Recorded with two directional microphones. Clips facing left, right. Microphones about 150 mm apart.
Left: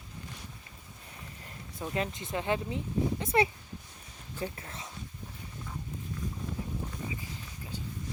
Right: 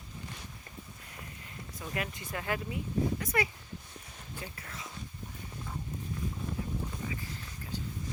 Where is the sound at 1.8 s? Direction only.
25° left (ahead or behind).